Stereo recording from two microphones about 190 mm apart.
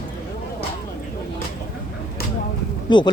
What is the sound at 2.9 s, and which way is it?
Speech, 25° left (ahead or behind).